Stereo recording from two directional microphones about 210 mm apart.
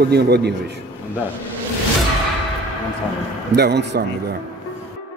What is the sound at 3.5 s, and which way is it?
Speech, 50° right (ahead or behind).